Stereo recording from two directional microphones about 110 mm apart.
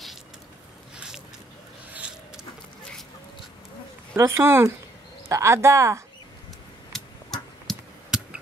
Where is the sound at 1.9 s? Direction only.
10° right (ahead or behind).